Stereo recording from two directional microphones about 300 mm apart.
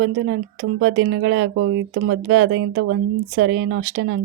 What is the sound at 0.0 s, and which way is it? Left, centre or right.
Speech, right.